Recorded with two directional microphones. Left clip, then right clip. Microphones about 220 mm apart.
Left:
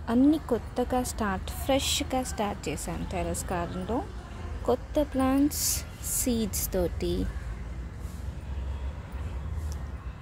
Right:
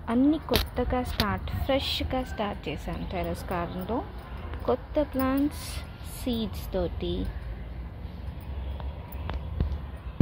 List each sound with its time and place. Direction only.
0.0 s a woman's voice: 10° left (ahead or behind)